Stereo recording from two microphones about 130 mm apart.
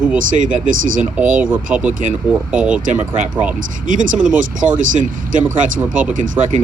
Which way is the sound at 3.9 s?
90° right.